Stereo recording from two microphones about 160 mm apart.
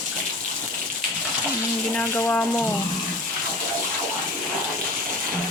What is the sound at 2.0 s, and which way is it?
Frying, 10° left (ahead or behind).